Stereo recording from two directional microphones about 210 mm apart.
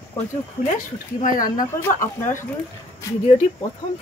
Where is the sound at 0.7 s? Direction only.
40° left (ahead or behind).